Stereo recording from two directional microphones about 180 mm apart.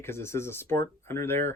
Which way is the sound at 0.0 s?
15° left (ahead or behind).